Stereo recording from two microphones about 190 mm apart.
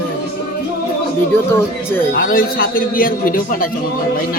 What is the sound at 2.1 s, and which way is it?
A man's voice, 50° left (ahead or behind).